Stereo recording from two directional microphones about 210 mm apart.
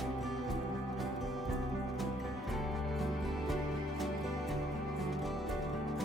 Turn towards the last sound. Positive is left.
turn(degrees=0)  # may be behind; listen again after turning